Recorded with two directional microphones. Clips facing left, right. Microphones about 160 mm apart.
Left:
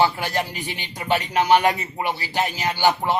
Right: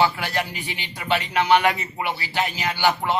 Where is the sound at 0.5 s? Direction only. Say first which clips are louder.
Left 2 dB; 45° left (ahead or behind).